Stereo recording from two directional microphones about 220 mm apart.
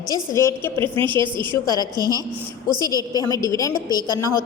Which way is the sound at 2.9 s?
15° left (ahead or behind).